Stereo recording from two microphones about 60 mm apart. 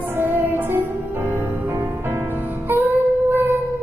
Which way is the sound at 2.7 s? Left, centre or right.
Right.